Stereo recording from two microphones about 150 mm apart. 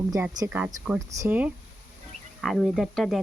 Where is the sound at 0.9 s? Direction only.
20° right (ahead or behind).